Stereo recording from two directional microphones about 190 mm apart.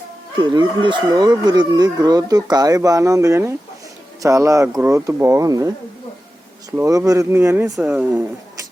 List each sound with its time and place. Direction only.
0.3 s speech: 25° right (ahead or behind); by 8.2 s 10° right (ahead or behind)